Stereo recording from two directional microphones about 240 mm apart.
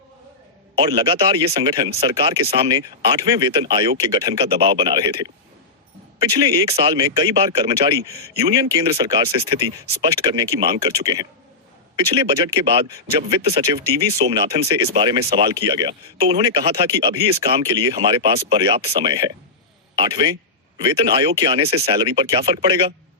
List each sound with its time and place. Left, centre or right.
0.8 s speech: right
14.3 s speech: right